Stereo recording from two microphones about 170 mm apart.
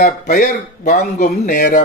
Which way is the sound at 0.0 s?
55° left (ahead or behind).